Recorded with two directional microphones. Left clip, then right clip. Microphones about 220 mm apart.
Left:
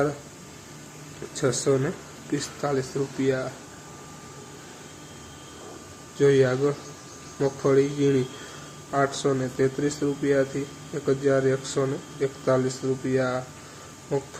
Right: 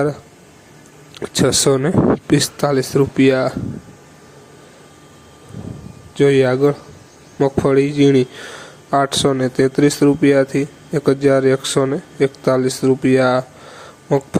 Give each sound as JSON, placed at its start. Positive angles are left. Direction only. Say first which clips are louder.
{"t": 1.3, "sound": "speech", "louder": "right 9 dB", "side_deg": -45}
{"t": 6.1, "sound": "speech", "louder": "right 7 dB", "side_deg": -35}